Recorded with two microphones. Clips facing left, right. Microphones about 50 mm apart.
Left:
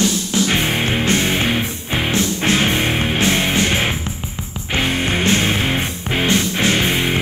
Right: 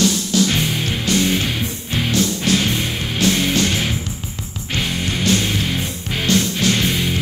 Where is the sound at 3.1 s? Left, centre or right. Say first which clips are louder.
Right 3 dB; left.